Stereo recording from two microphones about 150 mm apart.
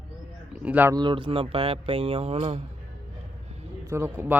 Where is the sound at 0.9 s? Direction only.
30° right (ahead or behind).